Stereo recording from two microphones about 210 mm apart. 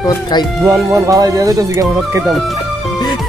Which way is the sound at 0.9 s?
15° right (ahead or behind).